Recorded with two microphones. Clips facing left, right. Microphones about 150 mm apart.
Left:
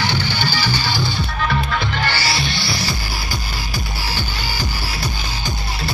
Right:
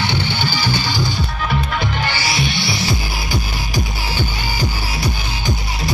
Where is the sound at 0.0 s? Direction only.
20° right (ahead or behind).